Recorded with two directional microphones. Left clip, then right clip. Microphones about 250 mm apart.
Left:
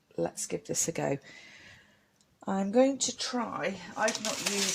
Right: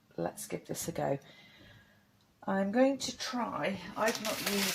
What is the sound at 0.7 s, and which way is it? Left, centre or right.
Speech, left.